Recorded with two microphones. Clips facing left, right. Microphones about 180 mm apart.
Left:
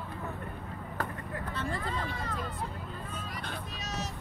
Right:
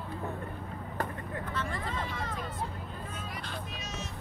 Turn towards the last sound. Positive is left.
turn(degrees=40)  # may be behind; listen again after turning